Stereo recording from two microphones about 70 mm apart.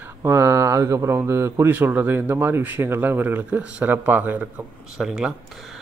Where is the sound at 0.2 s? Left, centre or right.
Right.